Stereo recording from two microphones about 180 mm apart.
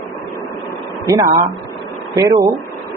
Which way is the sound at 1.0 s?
15° right (ahead or behind).